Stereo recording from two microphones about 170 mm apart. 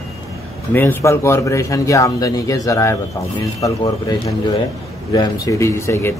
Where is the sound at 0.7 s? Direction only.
10° left (ahead or behind).